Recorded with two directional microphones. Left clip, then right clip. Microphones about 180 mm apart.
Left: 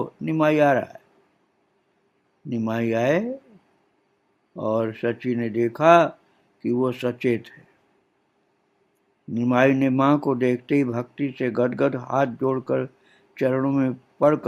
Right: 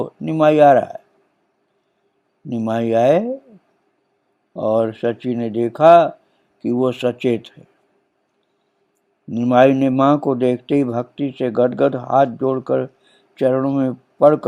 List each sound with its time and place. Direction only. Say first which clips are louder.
0.0 s speech: right 6 dB; 20° right (ahead or behind)
2.5 s speech: right 6 dB; 20° right (ahead or behind)
4.5 s speech: right 7 dB; 15° right (ahead or behind)
9.3 s speech: right 7 dB; 20° right (ahead or behind)